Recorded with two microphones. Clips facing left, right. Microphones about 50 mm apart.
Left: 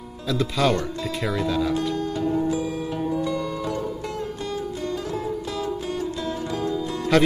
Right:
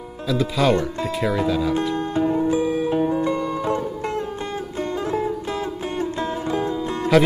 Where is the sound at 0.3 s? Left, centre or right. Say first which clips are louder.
Right 3 dB; centre.